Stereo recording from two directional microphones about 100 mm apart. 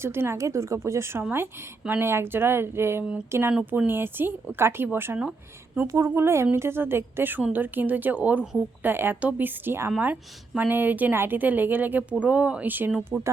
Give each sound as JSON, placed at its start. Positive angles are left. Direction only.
{"t": 0.0, "sound": "a woman's voice", "side_deg": -25}